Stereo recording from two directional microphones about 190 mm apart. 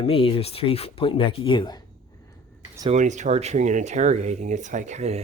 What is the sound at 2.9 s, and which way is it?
Speech, 40° right (ahead or behind).